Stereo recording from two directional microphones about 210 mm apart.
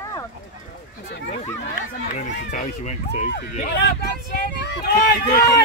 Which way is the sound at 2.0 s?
35° left (ahead or behind).